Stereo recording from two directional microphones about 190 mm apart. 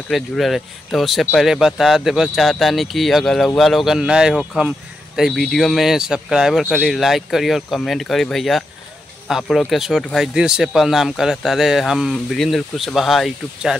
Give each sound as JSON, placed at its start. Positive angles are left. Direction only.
{"t": 0.1, "sound": "speech", "side_deg": 0}